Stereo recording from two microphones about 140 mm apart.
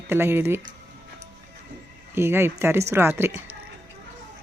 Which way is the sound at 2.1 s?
15° right (ahead or behind).